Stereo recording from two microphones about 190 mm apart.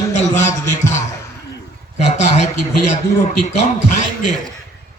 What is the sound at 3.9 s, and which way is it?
Speech, 40° left (ahead or behind).